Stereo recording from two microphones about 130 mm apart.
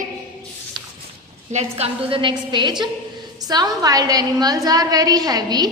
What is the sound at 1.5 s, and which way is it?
Speech, 60° right (ahead or behind).